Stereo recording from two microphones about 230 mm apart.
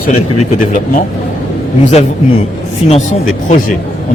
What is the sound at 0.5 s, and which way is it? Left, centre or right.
Speech, left.